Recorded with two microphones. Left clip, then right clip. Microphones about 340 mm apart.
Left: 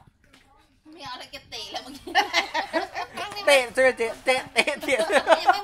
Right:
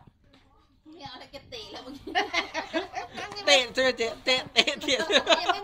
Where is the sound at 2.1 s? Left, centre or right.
Centre.